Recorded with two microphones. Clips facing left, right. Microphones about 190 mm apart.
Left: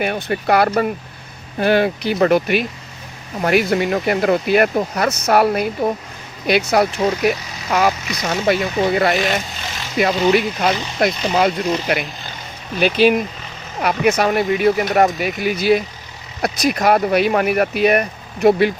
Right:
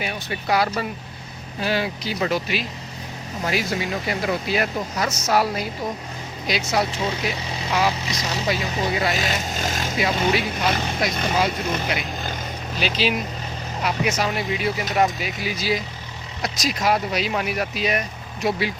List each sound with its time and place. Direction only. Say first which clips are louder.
0.0 s speech: left 8 dB; 55° left (ahead or behind)
9.6 s speech: right 4 dB; 45° right (ahead or behind)
10.0 s speech: left 7 dB; 55° left (ahead or behind)